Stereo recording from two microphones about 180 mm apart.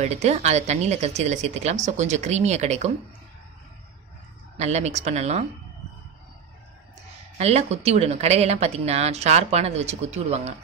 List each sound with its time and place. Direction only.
0.0 s speech: 35° right (ahead or behind)
4.6 s speech: 40° right (ahead or behind)
7.3 s speech: 35° right (ahead or behind)